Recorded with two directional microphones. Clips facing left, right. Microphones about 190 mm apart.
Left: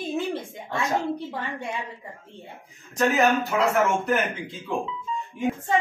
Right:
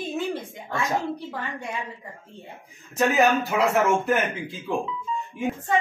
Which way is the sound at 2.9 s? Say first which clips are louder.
Right 1 dB; centre (ahead or behind).